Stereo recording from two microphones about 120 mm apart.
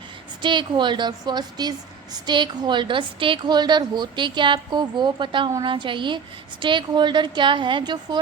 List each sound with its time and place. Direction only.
0.4 s a woman's voice: 40° right (ahead or behind)